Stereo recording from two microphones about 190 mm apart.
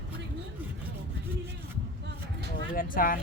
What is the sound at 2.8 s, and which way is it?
Speech, 45° left (ahead or behind).